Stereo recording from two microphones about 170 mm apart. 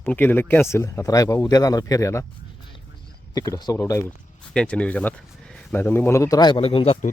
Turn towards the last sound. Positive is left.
turn(degrees=30)  # may be behind; listen again after turning